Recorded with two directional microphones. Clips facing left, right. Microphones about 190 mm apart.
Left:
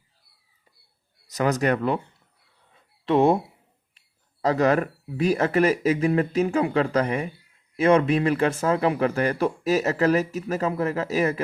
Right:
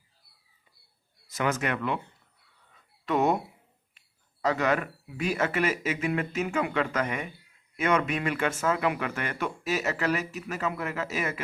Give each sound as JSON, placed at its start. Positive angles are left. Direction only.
{"t": 1.3, "sound": "speech", "side_deg": 40}
{"t": 2.7, "sound": "a sound", "side_deg": 30}
{"t": 4.4, "sound": "speech", "side_deg": 35}